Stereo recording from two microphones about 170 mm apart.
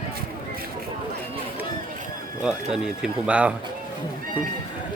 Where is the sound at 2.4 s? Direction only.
5° right (ahead or behind).